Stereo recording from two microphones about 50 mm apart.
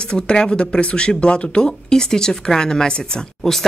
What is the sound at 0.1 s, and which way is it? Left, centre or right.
Speech, centre.